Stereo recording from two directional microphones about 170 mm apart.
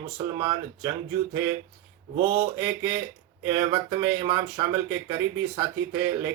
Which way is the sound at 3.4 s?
20° right (ahead or behind).